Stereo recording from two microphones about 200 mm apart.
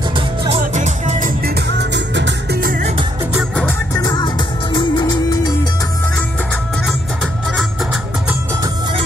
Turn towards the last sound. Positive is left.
turn(degrees=0)  # may be behind; listen again after turning